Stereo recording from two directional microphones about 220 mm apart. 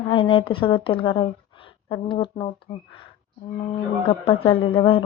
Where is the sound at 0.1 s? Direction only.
25° left (ahead or behind).